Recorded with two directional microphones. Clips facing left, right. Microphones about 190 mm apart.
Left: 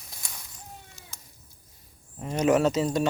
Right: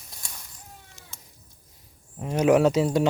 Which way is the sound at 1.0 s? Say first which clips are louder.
Even; 15° right (ahead or behind).